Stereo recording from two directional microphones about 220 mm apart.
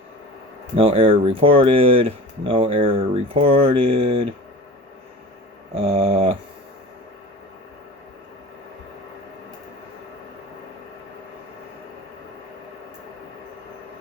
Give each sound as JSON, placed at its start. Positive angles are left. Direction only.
{"t": 0.8, "sound": "speech", "side_deg": -25}
{"t": 5.7, "sound": "speech", "side_deg": -25}